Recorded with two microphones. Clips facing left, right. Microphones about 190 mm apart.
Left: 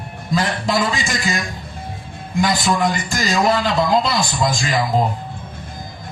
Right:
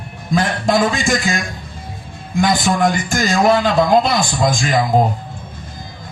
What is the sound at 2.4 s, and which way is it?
Speech, 50° right (ahead or behind).